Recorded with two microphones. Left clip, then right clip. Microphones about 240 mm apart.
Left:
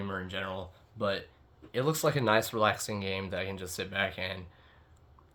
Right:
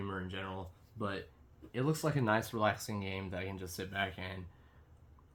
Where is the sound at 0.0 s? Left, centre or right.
Left.